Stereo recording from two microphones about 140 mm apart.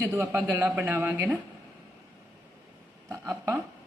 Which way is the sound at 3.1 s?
20° right (ahead or behind).